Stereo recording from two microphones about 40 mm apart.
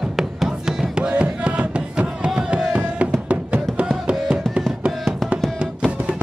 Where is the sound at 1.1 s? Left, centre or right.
Right.